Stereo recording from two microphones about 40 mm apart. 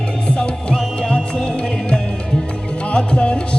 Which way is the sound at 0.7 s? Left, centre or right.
Left.